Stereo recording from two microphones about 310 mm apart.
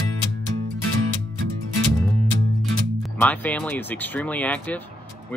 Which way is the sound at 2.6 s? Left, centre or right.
Centre.